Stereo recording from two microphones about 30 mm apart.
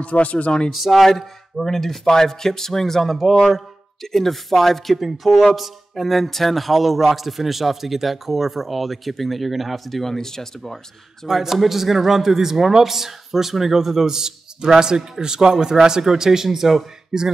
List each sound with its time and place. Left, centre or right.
0.0 s speech: left
0.7 s speech: centre
1.0 s speech: centre
4.9 s speech: centre
10.0 s speech: centre
11.2 s a man's voice: centre
17.1 s speech: right